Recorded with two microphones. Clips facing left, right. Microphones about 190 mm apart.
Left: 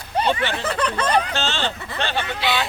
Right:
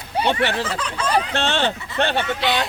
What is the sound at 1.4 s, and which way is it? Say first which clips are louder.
Speech: right 4 dB; 65° right (ahead or behind).